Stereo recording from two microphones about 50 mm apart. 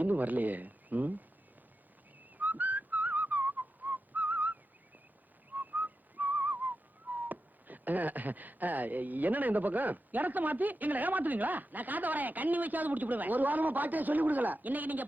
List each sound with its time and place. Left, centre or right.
0.0 s speech: right
2.4 s whistling: right